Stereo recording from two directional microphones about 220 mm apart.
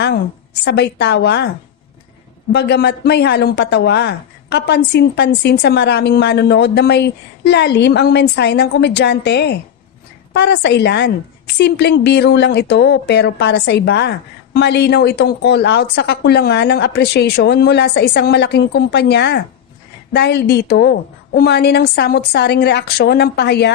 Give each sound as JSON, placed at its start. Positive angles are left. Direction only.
{"t": 0.6, "sound": "a woman's voice", "side_deg": 50}
{"t": 2.5, "sound": "a woman's voice", "side_deg": 50}